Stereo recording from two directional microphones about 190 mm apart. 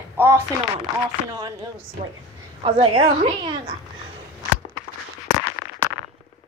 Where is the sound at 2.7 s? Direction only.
30° right (ahead or behind).